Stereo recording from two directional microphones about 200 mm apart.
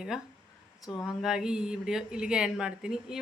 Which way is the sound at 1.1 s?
Centre (ahead or behind).